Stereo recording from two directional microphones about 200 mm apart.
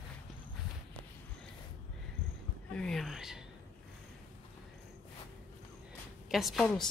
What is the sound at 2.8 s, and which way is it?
Speech, centre (ahead or behind).